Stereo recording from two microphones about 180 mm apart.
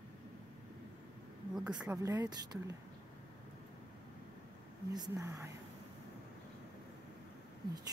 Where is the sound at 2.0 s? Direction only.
20° right (ahead or behind).